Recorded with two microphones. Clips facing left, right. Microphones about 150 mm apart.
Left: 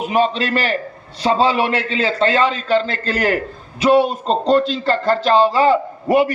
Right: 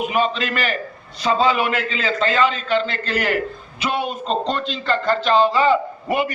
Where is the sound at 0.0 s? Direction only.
35° left (ahead or behind).